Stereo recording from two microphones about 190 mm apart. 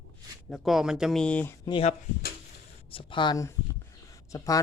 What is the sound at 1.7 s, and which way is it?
Speech, 30° left (ahead or behind).